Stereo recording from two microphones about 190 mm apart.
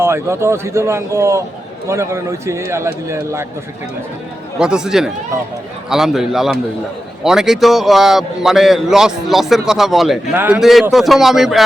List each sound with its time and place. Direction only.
0.0 s a man's voice: 15° right (ahead or behind)
4.5 s a man's voice: 5° right (ahead or behind)